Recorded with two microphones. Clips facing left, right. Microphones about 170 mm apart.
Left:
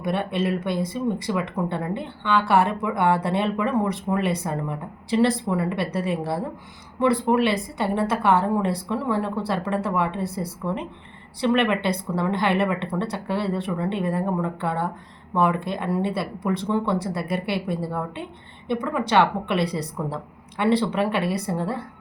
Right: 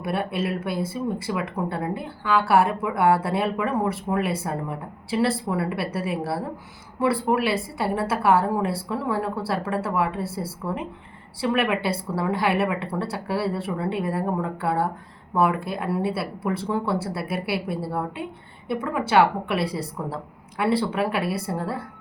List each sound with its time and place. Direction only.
0.0 s speech: 5° right (ahead or behind)